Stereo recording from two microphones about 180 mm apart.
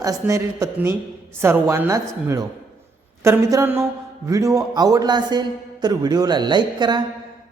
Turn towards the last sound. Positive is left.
turn(degrees=-25)  # may be behind; listen again after turning